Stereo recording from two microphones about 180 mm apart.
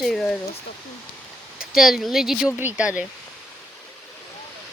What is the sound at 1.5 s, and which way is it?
Speech, centre (ahead or behind).